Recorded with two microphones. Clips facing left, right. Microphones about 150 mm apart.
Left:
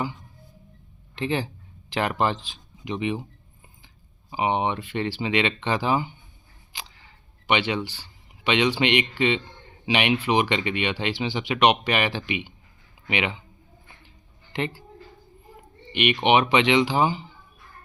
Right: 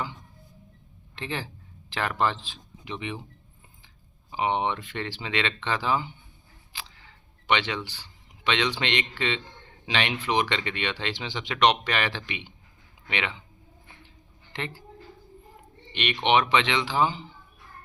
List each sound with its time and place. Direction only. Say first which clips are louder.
1.1 s speech: left 7 dB; 15° left (ahead or behind)
4.3 s speech: left 2 dB; 10° left (ahead or behind)
6.7 s a sound: left 1 dB; 15° left (ahead or behind)
7.4 s speech: left 3 dB; 10° left (ahead or behind)
14.5 s speech: left 7 dB; 15° left (ahead or behind)
15.9 s speech: left 4 dB; 10° left (ahead or behind)